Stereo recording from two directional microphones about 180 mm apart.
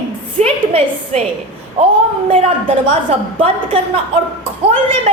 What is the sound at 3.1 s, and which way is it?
A woman's voice, 30° right (ahead or behind).